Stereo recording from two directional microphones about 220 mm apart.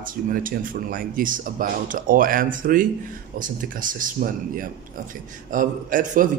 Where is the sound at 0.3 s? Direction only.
40° right (ahead or behind).